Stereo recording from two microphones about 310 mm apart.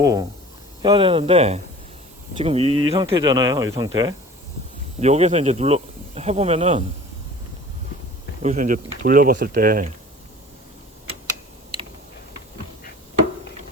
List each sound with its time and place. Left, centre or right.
0.0 s speech: centre
8.4 s speech: right